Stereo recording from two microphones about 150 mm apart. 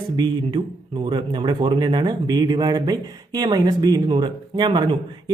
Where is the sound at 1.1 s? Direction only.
30° right (ahead or behind).